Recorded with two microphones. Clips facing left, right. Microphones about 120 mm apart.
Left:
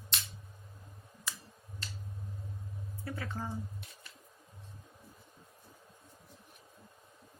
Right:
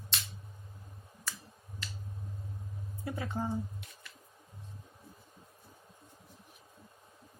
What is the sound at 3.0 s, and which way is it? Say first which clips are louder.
Speech: right 4 dB; 20° right (ahead or behind).